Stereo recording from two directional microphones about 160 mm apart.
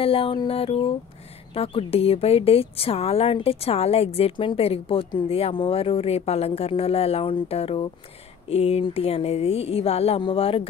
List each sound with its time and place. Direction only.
0.0 s a woman's voice: 35° left (ahead or behind)